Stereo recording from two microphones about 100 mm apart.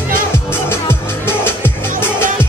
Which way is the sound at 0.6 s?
25° left (ahead or behind).